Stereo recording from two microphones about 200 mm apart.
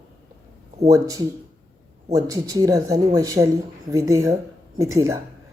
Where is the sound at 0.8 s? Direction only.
15° right (ahead or behind).